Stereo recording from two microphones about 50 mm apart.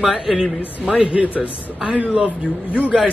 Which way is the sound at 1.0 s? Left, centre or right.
Right.